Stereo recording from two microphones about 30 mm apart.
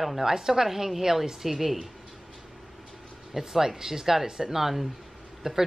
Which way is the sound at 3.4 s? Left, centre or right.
Centre.